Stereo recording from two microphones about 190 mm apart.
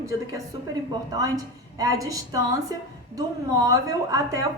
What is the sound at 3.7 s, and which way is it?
Speech, 20° right (ahead or behind).